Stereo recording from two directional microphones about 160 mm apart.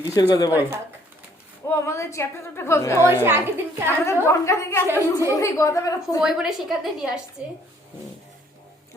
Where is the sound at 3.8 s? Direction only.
15° left (ahead or behind).